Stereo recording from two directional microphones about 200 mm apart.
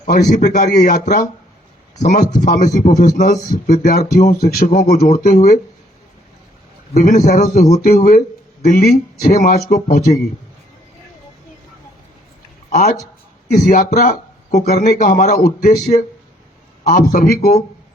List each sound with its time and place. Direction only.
0.0 s a man's voice: 40° left (ahead or behind)
6.9 s a man's voice: 45° left (ahead or behind)
13.5 s a man's voice: 45° left (ahead or behind)
16.8 s a man's voice: 45° left (ahead or behind)